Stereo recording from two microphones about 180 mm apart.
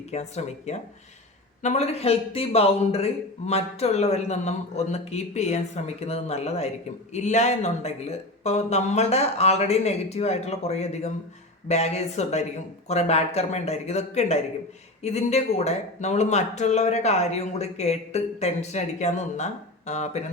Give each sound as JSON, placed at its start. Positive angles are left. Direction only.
{"t": 0.1, "sound": "speech", "side_deg": 40}